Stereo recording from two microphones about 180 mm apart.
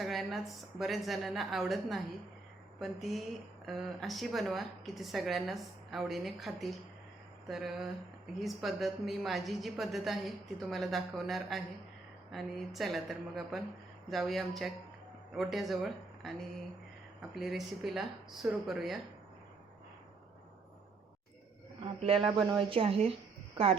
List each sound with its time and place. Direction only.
0.0 s a woman's voice: centre (ahead or behind)
17.4 s a woman's voice: centre (ahead or behind)
22.0 s speech: 30° right (ahead or behind)